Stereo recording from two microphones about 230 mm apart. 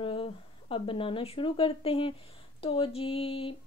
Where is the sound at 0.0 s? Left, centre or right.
Left.